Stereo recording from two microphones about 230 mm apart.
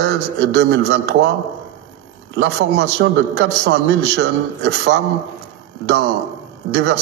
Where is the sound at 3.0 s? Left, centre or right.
Right.